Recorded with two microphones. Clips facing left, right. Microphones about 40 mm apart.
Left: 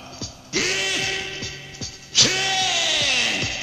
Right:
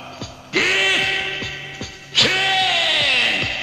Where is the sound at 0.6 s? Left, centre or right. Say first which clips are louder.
Right 6 dB; right.